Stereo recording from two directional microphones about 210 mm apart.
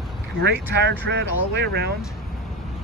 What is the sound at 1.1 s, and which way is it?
Speech, 55° right (ahead or behind).